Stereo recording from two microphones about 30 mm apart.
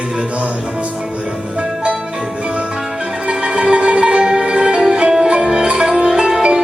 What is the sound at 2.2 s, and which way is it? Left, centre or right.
Music, right.